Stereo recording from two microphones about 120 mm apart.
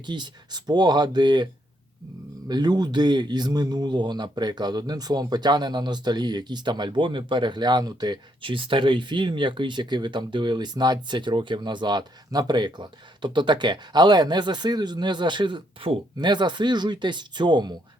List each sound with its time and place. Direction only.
0.0 s speech: 40° right (ahead or behind)
2.5 s speech: 35° right (ahead or behind)